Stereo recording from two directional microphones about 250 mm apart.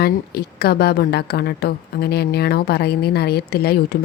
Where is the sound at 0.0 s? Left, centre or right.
Left.